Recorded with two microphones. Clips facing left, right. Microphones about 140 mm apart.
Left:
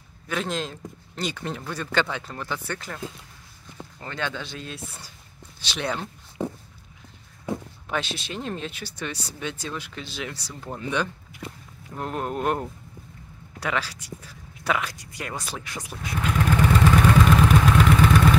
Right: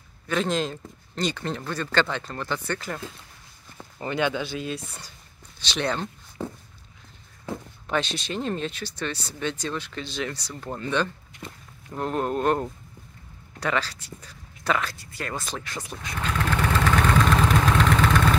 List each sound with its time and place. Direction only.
0.3 s speech: centre (ahead or behind)
4.0 s speech: 15° right (ahead or behind); by 6.0 s 5° left (ahead or behind)
6.4 s speech: 20° left (ahead or behind)
7.9 s speech: 5° left (ahead or behind)
17.5 s vehicle: 5° left (ahead or behind)